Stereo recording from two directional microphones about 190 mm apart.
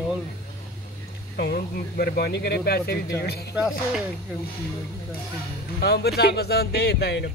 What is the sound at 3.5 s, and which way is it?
Speech, 5° right (ahead or behind).